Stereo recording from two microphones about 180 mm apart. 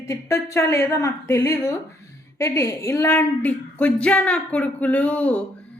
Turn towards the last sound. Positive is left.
turn(degrees=5)  # may be behind; listen again after turning